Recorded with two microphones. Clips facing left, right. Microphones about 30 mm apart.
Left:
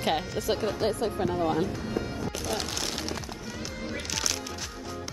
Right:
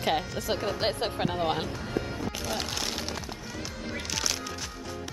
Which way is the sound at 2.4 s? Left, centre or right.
Centre.